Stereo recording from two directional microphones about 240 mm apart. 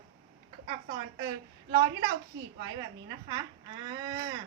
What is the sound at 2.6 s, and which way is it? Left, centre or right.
A woman's voice, centre.